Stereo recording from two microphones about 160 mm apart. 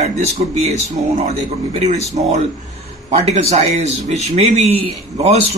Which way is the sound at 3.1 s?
45° right (ahead or behind).